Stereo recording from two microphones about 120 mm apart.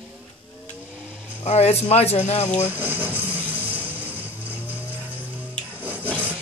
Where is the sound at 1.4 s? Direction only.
60° left (ahead or behind).